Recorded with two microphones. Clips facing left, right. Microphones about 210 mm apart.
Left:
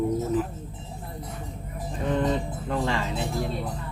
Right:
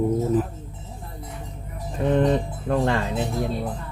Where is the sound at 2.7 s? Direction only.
55° right (ahead or behind).